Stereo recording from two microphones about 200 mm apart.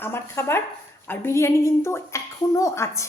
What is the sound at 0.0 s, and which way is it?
Speech, 10° left (ahead or behind).